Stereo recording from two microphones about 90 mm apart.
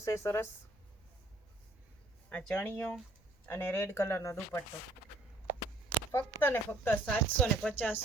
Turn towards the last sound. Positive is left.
turn(degrees=20)  # may be behind; listen again after turning